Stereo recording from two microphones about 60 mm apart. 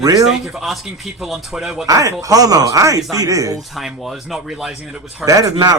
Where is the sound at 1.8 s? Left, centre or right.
Right.